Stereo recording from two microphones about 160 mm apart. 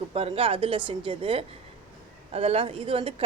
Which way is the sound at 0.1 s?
40° right (ahead or behind).